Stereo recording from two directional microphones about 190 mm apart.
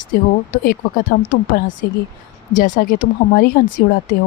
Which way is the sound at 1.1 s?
50° left (ahead or behind).